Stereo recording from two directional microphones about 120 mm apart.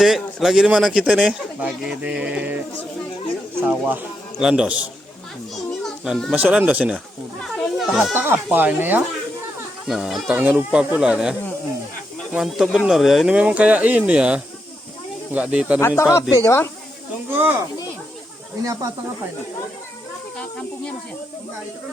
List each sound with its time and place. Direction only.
0.0 s speech: centre (ahead or behind)
5.8 s children playing: 5° left (ahead or behind)
6.3 s speech: 15° right (ahead or behind)
7.5 s children playing: centre (ahead or behind)
7.9 s speech: 15° right (ahead or behind)
9.8 s speech: 5° right (ahead or behind)
10.2 s speech: 15° right (ahead or behind)
16.0 s speech: 25° left (ahead or behind)
18.6 s speech: 30° right (ahead or behind)